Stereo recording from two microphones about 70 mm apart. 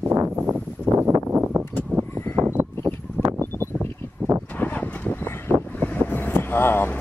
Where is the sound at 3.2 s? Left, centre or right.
Right.